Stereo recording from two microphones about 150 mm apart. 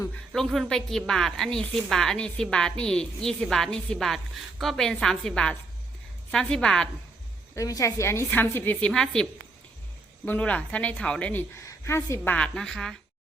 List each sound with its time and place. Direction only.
0.3 s a woman's voice: centre (ahead or behind)
7.5 s a woman's voice: 20° left (ahead or behind); by 9.2 s 5° left (ahead or behind)
10.2 s a woman's voice: 10° left (ahead or behind)